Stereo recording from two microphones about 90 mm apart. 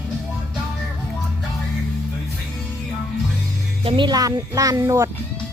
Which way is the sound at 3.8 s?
65° right (ahead or behind).